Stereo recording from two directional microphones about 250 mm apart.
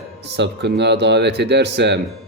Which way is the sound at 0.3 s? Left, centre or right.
Right.